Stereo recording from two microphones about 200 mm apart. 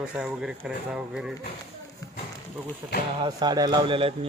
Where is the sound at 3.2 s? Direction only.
20° right (ahead or behind).